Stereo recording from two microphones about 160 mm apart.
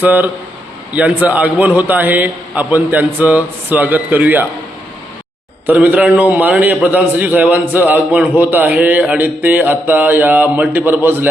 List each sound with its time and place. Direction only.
0.0 s speech: 10° right (ahead or behind)
5.6 s speech: 10° right (ahead or behind)